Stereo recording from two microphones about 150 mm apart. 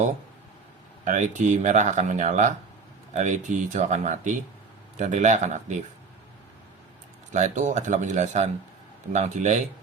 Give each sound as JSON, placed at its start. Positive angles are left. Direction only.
{"t": 1.0, "sound": "speech", "side_deg": -55}
{"t": 7.3, "sound": "speech", "side_deg": -55}